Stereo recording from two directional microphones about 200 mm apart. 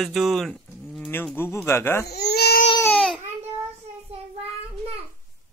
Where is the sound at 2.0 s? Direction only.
55° left (ahead or behind).